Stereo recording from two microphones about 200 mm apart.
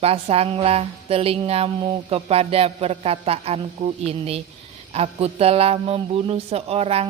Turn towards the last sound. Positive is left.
turn(degrees=-30)  # may be behind; listen again after turning